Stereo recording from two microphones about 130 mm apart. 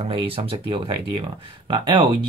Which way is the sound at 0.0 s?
45° right (ahead or behind).